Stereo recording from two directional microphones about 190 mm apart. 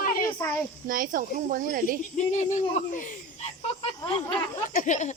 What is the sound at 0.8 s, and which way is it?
Speech, 45° right (ahead or behind).